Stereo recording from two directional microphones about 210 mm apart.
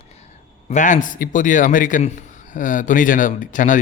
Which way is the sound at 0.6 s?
35° left (ahead or behind).